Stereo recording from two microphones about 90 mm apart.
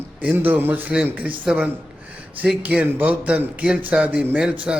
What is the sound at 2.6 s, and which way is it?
A man's voice, 15° right (ahead or behind).